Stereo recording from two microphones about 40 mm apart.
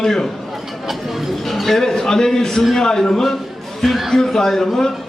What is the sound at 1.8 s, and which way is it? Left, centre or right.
A man's voice, centre.